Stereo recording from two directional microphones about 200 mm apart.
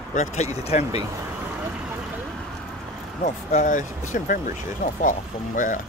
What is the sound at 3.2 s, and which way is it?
Speech, 40° left (ahead or behind).